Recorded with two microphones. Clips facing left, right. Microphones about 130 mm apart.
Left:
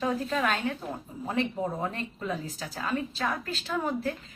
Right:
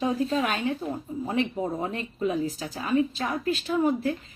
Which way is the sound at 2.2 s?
15° right (ahead or behind).